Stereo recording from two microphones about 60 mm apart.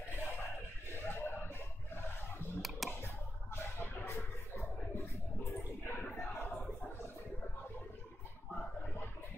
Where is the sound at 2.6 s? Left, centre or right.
Centre.